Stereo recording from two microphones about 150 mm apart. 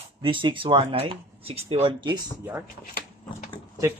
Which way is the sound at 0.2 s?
35° right (ahead or behind).